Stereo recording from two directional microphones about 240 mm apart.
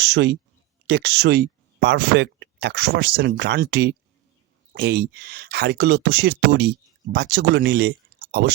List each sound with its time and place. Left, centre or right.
0.0 s speech: right